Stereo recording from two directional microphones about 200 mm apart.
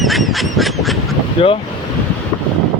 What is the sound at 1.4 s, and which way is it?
Speech, 25° left (ahead or behind).